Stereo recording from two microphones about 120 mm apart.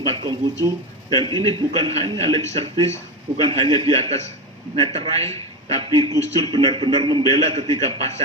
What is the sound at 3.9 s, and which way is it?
A man's voice, 55° right (ahead or behind).